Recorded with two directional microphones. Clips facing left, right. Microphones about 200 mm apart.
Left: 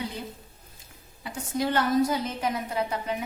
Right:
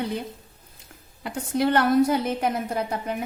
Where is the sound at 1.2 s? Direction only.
65° right (ahead or behind).